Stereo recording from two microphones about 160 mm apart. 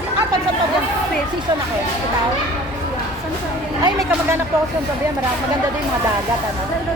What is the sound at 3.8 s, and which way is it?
Speech, 20° right (ahead or behind).